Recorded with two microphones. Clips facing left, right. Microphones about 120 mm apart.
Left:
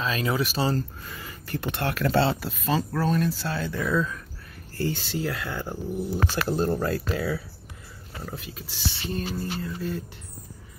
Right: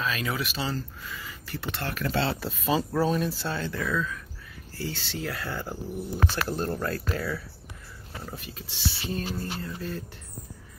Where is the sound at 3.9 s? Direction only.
35° left (ahead or behind).